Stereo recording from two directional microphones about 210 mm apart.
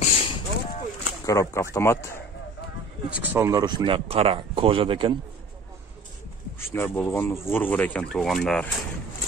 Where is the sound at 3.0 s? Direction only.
10° right (ahead or behind); by 5.1 s 25° right (ahead or behind).